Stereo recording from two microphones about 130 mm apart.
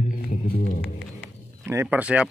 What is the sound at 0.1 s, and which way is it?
Music, 90° left.